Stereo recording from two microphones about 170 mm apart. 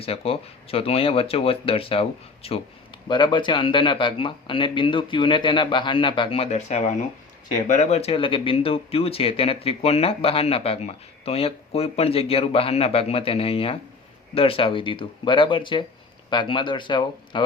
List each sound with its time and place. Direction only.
0.0 s speech: 35° left (ahead or behind)